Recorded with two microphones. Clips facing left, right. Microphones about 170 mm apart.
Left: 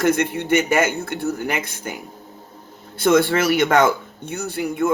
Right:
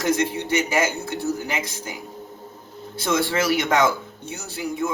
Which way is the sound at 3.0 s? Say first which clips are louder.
Left 6 dB; 60° left (ahead or behind).